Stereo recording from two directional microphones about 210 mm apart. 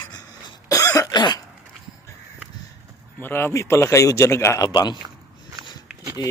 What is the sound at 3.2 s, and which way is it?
A man's voice, 10° left (ahead or behind).